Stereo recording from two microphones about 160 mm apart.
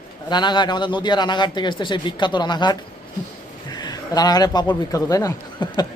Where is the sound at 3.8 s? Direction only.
25° left (ahead or behind).